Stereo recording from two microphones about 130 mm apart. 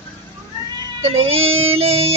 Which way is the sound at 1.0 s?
50° right (ahead or behind).